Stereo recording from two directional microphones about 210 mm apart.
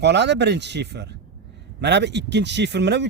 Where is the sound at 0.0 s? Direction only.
55° right (ahead or behind).